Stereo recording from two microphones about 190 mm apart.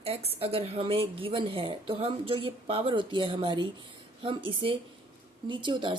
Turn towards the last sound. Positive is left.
turn(degrees=-25)  # may be behind; listen again after turning